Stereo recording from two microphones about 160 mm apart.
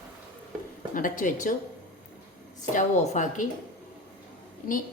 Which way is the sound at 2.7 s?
50° left (ahead or behind).